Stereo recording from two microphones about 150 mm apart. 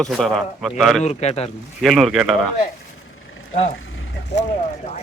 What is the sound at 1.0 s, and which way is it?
Speech, 45° left (ahead or behind).